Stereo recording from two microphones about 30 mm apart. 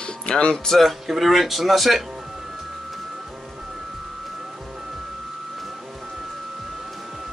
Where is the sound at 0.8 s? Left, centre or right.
Centre.